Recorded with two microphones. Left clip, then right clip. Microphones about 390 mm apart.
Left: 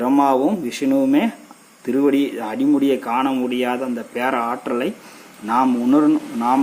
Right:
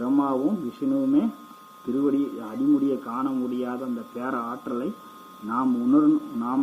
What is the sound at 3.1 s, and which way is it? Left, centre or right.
A man's voice, left.